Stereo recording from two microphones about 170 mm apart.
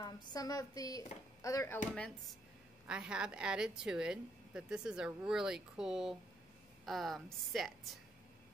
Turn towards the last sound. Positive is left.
turn(degrees=0)  # may be behind; listen again after turning